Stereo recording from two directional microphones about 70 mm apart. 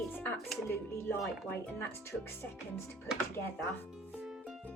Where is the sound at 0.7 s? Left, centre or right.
Left.